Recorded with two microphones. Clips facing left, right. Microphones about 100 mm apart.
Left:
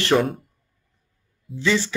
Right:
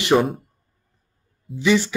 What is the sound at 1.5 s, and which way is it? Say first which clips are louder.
Speech: right 3 dB; 15° right (ahead or behind).